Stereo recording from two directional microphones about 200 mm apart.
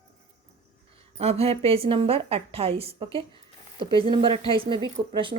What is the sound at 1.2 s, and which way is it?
Speech, 30° right (ahead or behind).